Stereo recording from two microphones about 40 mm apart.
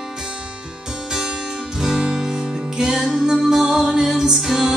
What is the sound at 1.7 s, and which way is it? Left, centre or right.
Music, centre.